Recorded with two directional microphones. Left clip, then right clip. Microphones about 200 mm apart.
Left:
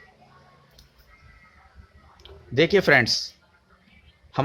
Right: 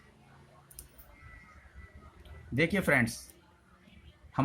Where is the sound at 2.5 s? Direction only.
45° left (ahead or behind).